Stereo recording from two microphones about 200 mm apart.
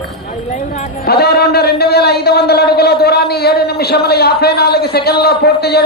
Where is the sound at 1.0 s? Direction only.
55° left (ahead or behind).